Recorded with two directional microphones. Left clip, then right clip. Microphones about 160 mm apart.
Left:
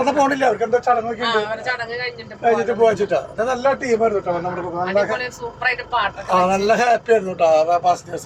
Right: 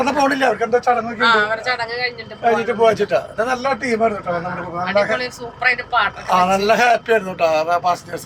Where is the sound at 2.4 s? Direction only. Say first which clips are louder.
Right 1 dB; 10° right (ahead or behind).